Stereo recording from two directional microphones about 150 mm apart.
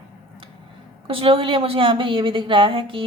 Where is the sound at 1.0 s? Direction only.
35° right (ahead or behind).